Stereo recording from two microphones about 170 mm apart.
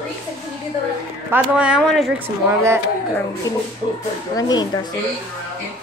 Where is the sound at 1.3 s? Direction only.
5° right (ahead or behind).